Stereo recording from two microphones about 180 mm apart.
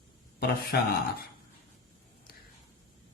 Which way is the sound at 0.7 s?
60° left (ahead or behind).